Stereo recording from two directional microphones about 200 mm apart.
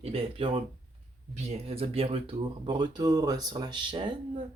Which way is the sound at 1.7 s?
30° right (ahead or behind).